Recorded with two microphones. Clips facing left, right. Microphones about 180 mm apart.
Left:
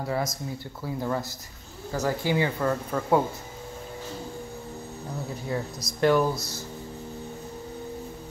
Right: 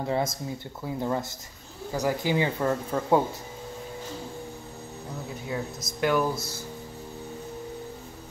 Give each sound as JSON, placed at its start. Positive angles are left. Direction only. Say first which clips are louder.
{"t": 0.0, "sound": "speech", "louder": "right 1 dB", "side_deg": -25}
{"t": 5.9, "sound": "speech", "louder": "left 3 dB", "side_deg": -5}
{"t": 6.3, "sound": "speech", "louder": "right 1 dB", "side_deg": -30}